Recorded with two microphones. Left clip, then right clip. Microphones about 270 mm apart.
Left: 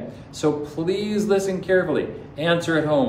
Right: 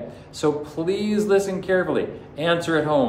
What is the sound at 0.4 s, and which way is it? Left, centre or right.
Speech, centre.